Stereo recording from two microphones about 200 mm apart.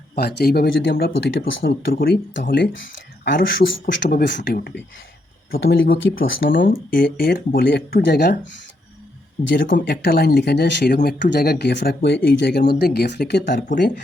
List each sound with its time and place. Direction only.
0.2 s speech: 55° left (ahead or behind)
1.5 s speech: 65° left (ahead or behind); by 2.6 s 50° left (ahead or behind)
3.2 s speech: 65° left (ahead or behind)
5.5 s speech: 70° left (ahead or behind)
6.7 s speech: 45° left (ahead or behind)
9.6 s speech: 45° left (ahead or behind)